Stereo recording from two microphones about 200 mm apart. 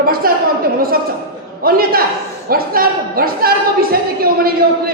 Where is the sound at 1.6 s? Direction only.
50° right (ahead or behind).